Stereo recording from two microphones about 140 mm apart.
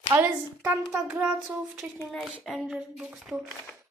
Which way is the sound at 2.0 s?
Centre (ahead or behind).